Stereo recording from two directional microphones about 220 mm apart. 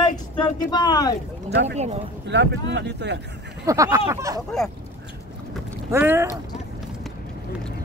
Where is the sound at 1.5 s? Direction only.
55° right (ahead or behind).